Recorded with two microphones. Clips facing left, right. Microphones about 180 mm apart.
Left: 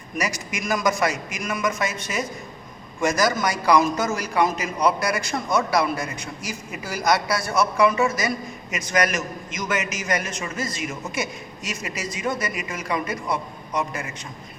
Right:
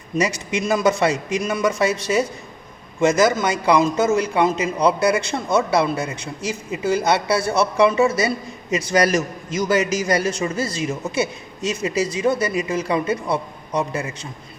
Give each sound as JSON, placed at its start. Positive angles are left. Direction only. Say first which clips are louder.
{"t": 0.2, "sound": "a man's voice", "louder": "right 6 dB", "side_deg": -30}